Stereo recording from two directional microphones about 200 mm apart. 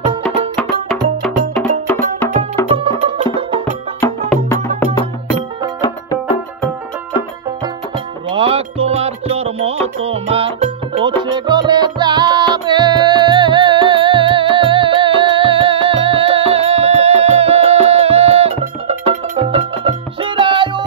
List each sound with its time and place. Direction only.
1.2 s music: centre (ahead or behind)
2.7 s music: 25° right (ahead or behind)
5.8 s music: 20° left (ahead or behind)
8.3 s music: 25° right (ahead or behind)